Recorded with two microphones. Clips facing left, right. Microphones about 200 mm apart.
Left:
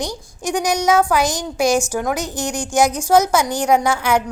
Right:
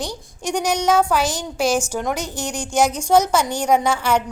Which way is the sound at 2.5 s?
10° left (ahead or behind).